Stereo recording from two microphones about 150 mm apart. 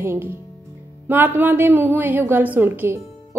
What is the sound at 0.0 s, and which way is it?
A woman's voice, 15° right (ahead or behind).